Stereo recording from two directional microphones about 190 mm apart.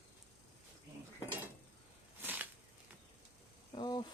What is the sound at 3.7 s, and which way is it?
Speech, 25° left (ahead or behind).